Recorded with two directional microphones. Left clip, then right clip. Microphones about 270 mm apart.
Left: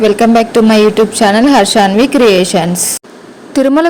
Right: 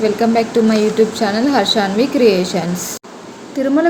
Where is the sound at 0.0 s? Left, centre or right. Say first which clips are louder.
Left 6 dB; left.